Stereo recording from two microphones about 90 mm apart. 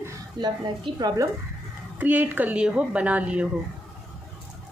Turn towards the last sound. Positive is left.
turn(degrees=-15)  # may be behind; listen again after turning